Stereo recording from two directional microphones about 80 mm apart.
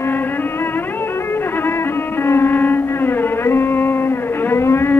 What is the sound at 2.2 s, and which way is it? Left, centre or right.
Music, left.